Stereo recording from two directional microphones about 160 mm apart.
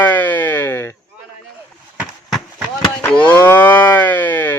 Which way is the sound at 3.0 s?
10° left (ahead or behind).